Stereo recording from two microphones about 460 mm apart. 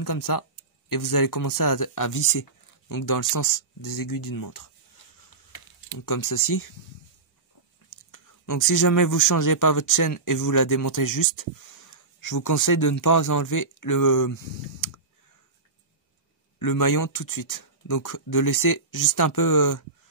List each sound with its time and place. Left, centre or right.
0.0 s speech: left
5.9 s speech: left
8.1 s speech: left
16.5 s speech: left